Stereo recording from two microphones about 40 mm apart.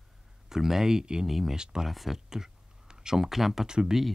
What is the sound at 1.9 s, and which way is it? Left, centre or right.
Speech, centre.